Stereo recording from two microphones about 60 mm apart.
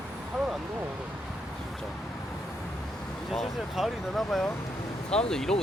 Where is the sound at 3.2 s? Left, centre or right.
Centre.